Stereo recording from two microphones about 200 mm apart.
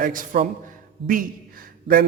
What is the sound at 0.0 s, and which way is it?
A man's voice, 45° right (ahead or behind).